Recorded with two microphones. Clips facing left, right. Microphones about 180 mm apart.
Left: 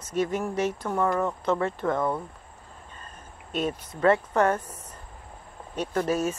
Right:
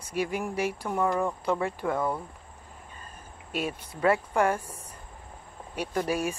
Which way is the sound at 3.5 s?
10° right (ahead or behind).